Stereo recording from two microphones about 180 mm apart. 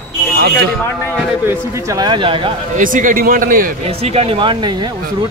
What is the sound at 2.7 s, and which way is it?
A man's voice, 45° right (ahead or behind).